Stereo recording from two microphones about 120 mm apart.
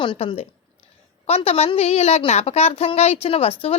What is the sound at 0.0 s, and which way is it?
A woman's voice, 45° left (ahead or behind).